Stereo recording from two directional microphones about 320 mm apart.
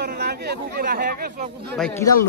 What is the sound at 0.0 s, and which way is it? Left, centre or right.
Speech, right.